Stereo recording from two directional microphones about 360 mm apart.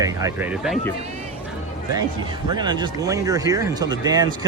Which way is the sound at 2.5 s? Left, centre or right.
Centre.